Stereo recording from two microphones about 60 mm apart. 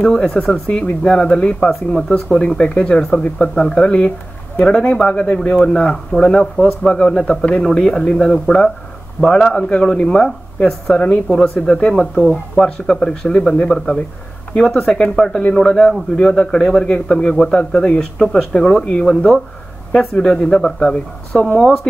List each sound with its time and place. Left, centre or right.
0.0 s speech: centre
21.5 s speech: centre